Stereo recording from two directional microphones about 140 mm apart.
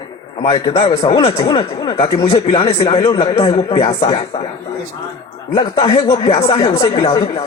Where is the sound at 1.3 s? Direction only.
30° left (ahead or behind).